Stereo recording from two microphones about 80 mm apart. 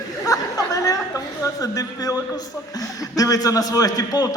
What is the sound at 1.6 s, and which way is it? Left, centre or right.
Speech, left.